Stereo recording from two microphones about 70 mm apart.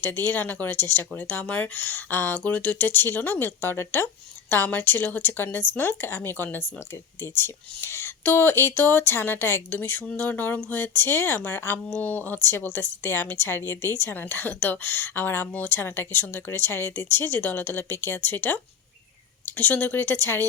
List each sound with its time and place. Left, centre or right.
0.0 s speech: left